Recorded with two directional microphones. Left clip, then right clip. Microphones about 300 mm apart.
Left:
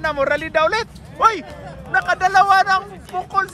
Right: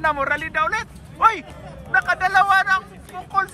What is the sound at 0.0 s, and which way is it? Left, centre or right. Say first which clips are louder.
Speech: left 2 dB; centre.